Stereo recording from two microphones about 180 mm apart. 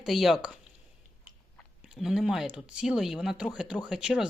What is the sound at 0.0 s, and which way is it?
Speech, centre (ahead or behind).